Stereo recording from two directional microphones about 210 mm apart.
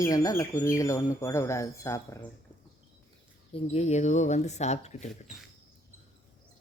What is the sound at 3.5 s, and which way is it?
Speech, 30° left (ahead or behind).